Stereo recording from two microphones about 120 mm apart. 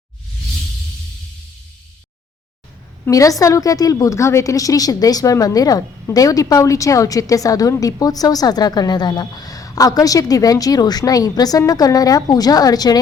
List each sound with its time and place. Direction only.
3.1 s a woman's voice: 30° left (ahead or behind)